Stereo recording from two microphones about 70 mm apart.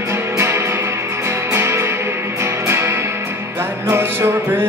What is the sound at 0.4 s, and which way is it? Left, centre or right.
Music, right.